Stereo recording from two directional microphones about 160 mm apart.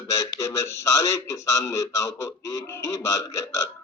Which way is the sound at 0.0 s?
20° left (ahead or behind).